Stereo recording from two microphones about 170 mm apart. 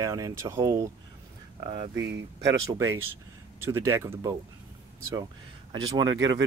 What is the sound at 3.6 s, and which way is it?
Speech, 15° right (ahead or behind).